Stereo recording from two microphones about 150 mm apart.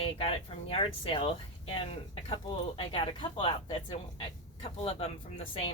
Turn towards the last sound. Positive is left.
turn(degrees=40)  # may be behind; listen again after turning